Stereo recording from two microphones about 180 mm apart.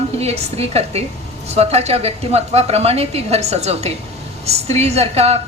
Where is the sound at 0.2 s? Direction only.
35° right (ahead or behind).